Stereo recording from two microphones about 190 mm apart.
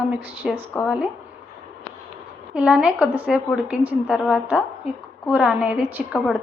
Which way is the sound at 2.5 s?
5° right (ahead or behind).